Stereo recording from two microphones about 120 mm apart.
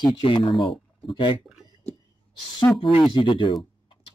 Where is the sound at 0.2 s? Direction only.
50° left (ahead or behind).